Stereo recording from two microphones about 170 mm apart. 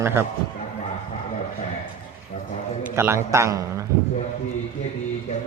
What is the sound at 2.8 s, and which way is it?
A man's voice, 15° right (ahead or behind).